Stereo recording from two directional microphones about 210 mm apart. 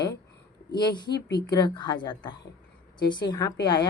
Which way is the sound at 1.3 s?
20° left (ahead or behind).